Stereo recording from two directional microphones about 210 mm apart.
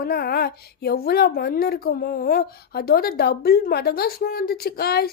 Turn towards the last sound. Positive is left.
turn(degrees=45)  # may be behind; listen again after turning